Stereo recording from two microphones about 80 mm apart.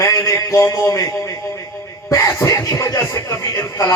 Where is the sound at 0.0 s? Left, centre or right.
Left.